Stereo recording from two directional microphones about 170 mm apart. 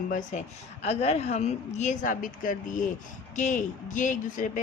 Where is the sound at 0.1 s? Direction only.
45° left (ahead or behind).